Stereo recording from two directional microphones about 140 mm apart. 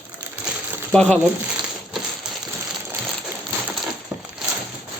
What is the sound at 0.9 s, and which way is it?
Speech, 10° left (ahead or behind).